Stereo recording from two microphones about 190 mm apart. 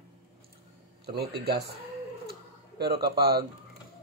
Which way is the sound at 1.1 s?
60° right (ahead or behind).